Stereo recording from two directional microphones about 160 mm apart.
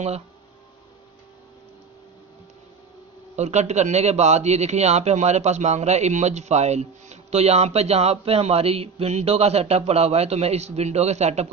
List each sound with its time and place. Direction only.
3.3 s a man's voice: 45° right (ahead or behind)